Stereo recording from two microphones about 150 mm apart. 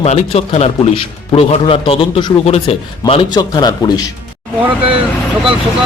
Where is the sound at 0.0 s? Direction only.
45° left (ahead or behind).